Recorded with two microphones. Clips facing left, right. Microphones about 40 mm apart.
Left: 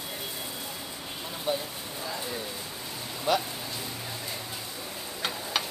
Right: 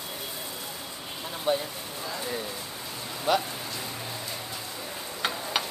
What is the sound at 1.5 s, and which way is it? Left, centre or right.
Speech, centre.